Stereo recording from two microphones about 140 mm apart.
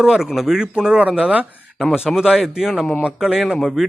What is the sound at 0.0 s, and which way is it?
Speech, 5° right (ahead or behind).